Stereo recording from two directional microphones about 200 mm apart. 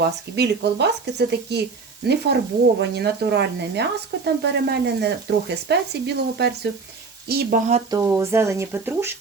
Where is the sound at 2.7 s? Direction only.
55° right (ahead or behind).